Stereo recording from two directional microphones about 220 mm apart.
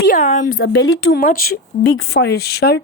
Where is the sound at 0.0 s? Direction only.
35° left (ahead or behind).